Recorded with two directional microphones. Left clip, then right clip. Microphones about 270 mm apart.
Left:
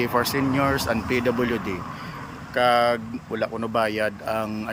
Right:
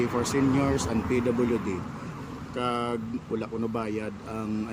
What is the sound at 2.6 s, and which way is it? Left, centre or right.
Speech, centre.